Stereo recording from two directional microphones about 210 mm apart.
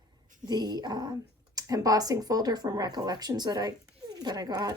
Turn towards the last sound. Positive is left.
turn(degrees=-20)  # may be behind; listen again after turning